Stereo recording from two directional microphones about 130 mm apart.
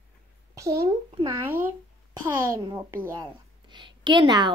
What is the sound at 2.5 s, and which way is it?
Speech, 25° right (ahead or behind).